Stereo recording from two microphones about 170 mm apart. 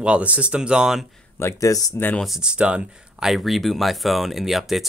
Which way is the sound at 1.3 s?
15° left (ahead or behind).